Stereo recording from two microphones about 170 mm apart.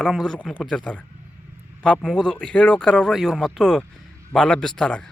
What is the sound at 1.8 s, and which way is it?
A man's voice, 5° left (ahead or behind).